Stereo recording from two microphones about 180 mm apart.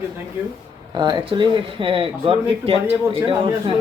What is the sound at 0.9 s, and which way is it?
Speech, 25° right (ahead or behind).